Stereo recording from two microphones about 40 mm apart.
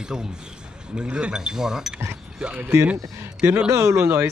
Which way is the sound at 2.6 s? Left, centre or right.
Right.